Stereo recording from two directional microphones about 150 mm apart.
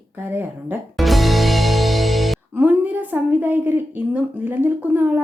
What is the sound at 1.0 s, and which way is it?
Music, centre (ahead or behind).